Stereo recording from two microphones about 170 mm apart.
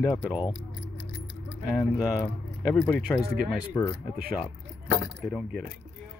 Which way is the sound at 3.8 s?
15° left (ahead or behind).